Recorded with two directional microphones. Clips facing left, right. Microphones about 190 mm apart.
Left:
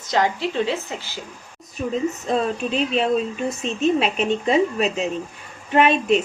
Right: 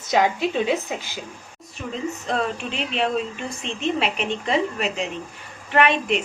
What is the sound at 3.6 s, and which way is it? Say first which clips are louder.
Speech: left 4 dB; 25° right (ahead or behind).